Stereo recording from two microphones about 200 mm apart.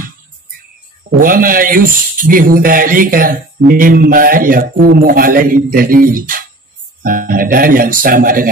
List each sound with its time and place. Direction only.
1.2 s a man's voice: 45° right (ahead or behind)